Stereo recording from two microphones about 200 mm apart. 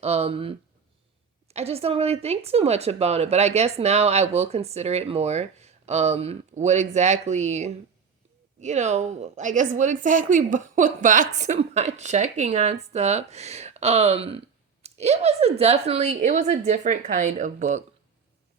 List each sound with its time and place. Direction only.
0.0 s speech: 30° right (ahead or behind)